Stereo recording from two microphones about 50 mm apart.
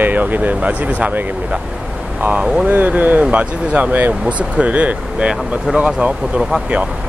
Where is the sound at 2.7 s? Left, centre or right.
Right.